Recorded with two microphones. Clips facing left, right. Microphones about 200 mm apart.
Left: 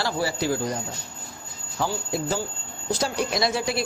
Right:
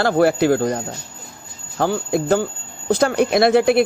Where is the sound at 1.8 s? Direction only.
60° right (ahead or behind).